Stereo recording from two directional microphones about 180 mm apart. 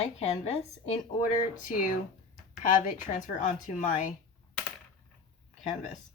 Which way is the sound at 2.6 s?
45° left (ahead or behind).